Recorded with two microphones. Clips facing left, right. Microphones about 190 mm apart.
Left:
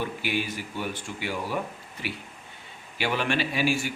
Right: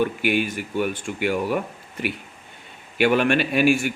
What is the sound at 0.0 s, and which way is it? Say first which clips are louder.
A man's voice: right 8 dB; 60° right (ahead or behind).